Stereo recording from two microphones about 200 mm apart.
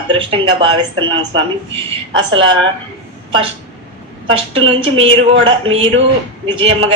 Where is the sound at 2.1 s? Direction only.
70° right (ahead or behind).